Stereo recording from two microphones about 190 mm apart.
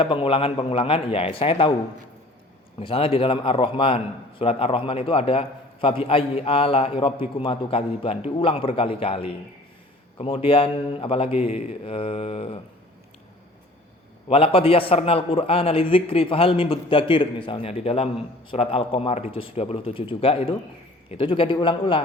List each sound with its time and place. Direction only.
0.0 s a man's voice: 30° left (ahead or behind)
2.7 s a man's voice: 30° left (ahead or behind)
14.3 s a man's voice: 30° left (ahead or behind)